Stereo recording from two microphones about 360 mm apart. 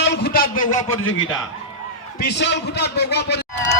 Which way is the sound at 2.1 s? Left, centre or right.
Left.